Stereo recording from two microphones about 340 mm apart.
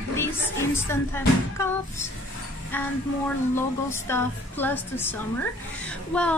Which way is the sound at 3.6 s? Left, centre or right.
Centre.